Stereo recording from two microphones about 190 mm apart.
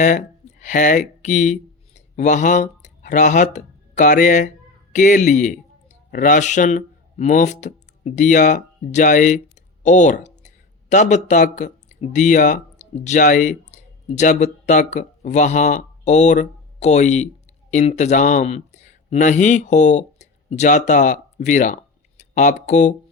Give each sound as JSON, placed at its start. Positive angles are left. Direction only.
{"t": 0.0, "sound": "speech", "side_deg": 40}